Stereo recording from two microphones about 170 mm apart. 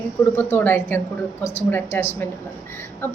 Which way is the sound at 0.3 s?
10° left (ahead or behind).